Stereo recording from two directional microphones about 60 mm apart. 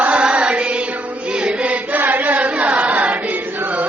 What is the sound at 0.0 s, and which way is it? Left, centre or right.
Music, centre.